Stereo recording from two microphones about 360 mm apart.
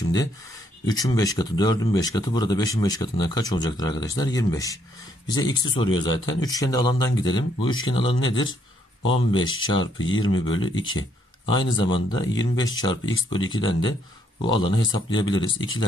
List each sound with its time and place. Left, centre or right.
0.8 s speech: centre
9.9 s speech: left
10.5 s speech: centre